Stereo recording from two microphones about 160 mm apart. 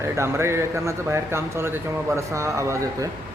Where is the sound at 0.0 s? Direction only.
15° right (ahead or behind).